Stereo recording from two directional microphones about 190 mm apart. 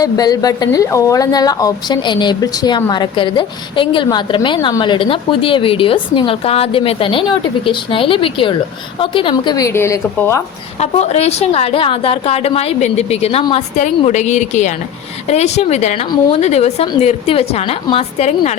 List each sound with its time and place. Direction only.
0.0 s a woman's voice: 20° left (ahead or behind)
10.8 s a woman's voice: 35° left (ahead or behind)